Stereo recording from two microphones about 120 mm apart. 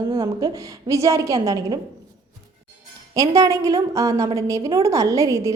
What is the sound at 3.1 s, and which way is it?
A woman's voice, 30° right (ahead or behind).